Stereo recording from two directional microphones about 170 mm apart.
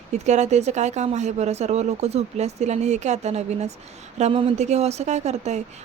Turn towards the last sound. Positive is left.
turn(degrees=-40)  # may be behind; listen again after turning